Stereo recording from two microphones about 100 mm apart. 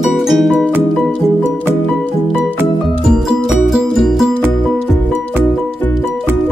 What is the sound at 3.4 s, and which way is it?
Music, 5° right (ahead or behind).